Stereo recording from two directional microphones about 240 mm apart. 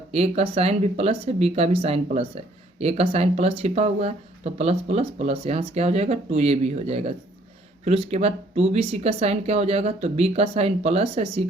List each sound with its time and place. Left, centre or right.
0.1 s speech: right